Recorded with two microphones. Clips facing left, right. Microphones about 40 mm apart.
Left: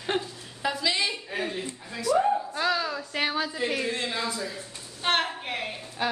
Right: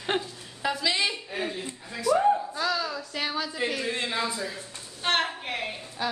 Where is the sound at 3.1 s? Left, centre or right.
Left.